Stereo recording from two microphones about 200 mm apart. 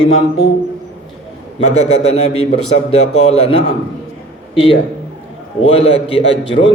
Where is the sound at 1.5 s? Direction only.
35° left (ahead or behind).